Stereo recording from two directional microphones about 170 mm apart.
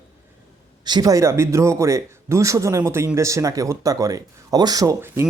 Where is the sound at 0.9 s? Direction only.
20° right (ahead or behind).